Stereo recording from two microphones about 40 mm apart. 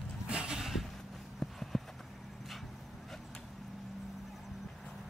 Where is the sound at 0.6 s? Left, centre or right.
Centre.